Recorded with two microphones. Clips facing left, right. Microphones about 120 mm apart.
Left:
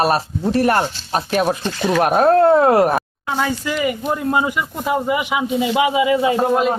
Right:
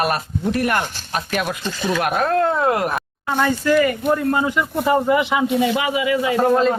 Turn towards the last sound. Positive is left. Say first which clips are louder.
# even
turn(degrees=15)  # may be behind; listen again after turning